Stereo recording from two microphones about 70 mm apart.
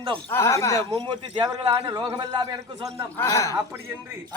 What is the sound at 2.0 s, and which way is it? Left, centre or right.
A man's voice, right.